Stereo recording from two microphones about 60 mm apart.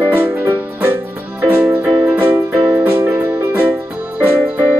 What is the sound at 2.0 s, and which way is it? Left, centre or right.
Music, right.